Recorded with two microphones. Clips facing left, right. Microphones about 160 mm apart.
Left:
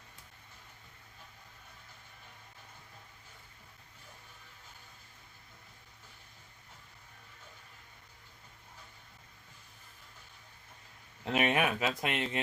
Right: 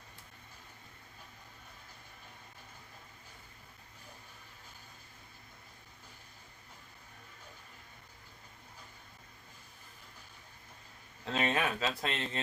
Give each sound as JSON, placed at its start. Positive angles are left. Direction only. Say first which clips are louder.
{"t": 11.3, "sound": "speech", "louder": "left 3 dB", "side_deg": 15}